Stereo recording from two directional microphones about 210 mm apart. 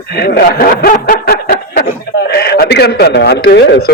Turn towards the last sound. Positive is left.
turn(degrees=50)  # may be behind; listen again after turning